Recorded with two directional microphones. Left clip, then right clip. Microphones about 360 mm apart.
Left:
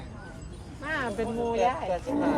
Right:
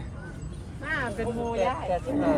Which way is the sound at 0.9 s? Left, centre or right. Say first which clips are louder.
Right 1 dB; left.